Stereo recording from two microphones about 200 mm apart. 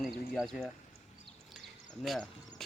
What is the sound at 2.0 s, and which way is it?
Speech, centre (ahead or behind).